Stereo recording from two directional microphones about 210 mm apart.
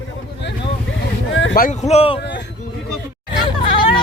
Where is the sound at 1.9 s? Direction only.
30° left (ahead or behind).